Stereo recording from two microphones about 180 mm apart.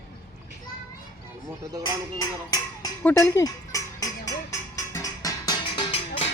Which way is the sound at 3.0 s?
10° left (ahead or behind).